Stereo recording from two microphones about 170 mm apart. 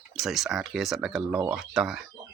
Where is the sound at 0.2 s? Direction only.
Centre (ahead or behind).